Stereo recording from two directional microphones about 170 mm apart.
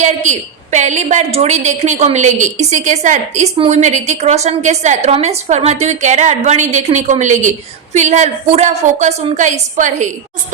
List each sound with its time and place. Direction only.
0.0 s a woman's voice: 45° right (ahead or behind)